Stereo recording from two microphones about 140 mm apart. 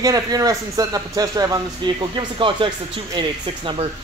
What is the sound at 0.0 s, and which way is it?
A man's voice, 25° right (ahead or behind).